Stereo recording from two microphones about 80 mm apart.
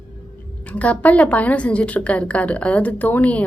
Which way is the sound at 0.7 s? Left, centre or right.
Centre.